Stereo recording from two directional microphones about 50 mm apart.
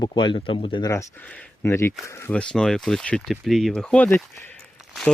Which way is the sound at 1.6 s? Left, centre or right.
Left.